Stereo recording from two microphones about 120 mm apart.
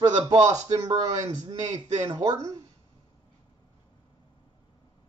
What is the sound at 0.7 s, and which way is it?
Speech, 35° right (ahead or behind).